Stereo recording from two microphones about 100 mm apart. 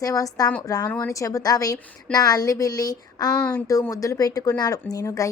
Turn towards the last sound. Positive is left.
turn(degrees=35)  # may be behind; listen again after turning